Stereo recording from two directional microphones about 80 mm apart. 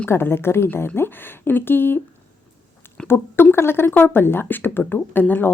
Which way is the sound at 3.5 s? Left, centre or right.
Left.